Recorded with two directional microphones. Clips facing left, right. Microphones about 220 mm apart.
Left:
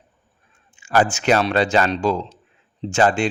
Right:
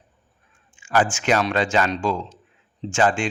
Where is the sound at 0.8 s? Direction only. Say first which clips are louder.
Left 2 dB; 40° left (ahead or behind).